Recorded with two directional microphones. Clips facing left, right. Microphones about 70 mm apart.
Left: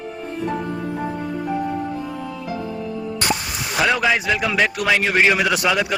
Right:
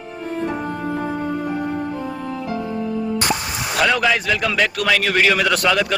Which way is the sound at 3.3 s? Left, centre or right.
Centre.